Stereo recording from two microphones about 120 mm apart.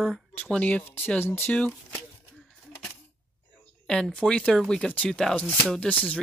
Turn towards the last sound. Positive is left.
turn(degrees=10)  # may be behind; listen again after turning